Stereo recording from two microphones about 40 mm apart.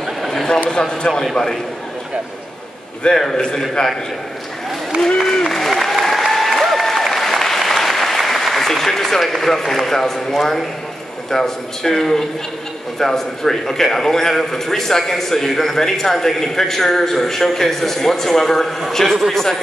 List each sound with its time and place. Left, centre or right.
0.3 s a sound: centre
0.7 s a man's voice: centre
3.0 s a man's voice: left
5.0 s applause: centre
8.3 s a man's voice: centre